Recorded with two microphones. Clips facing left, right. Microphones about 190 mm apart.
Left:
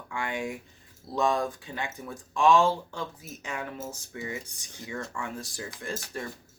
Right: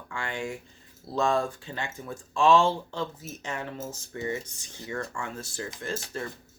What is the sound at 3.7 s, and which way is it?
Speech, 10° left (ahead or behind).